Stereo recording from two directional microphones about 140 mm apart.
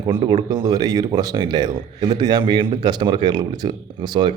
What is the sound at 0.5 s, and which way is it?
A man's voice, 30° right (ahead or behind).